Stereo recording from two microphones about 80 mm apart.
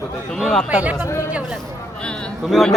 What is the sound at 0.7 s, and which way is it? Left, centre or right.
Speech, centre.